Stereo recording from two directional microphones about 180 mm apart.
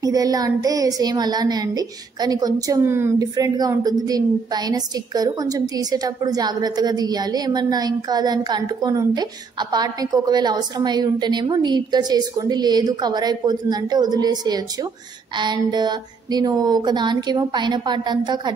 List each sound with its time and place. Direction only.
0.0 s a woman's voice: 20° right (ahead or behind)